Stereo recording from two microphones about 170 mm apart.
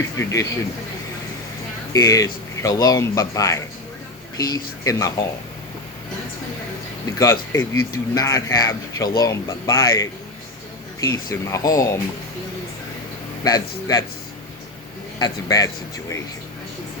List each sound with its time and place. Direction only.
0.2 s speech: 20° left (ahead or behind)
1.9 s speech: 20° left (ahead or behind)
7.2 s speech: 20° left (ahead or behind)
13.4 s speech: 20° left (ahead or behind)
15.2 s speech: 20° left (ahead or behind)